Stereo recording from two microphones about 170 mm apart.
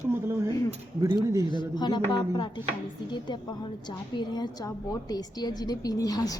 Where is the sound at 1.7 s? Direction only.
25° left (ahead or behind).